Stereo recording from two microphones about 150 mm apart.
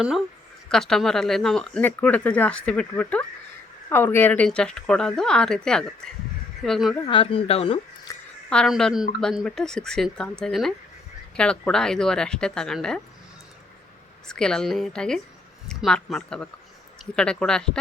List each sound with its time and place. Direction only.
0.7 s speech: 5° left (ahead or behind)
7.1 s speech: 35° left (ahead or behind)
8.1 s a sound: 20° left (ahead or behind)
8.4 s speech: 5° left (ahead or behind)
14.3 s speech: 5° left (ahead or behind)